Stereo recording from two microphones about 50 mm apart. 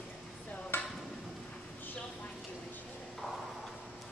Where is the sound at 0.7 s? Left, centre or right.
Left.